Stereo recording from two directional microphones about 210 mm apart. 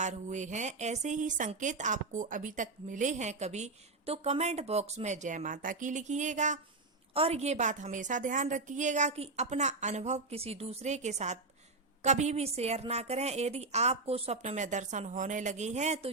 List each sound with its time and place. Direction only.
0.0 s speech: 35° right (ahead or behind)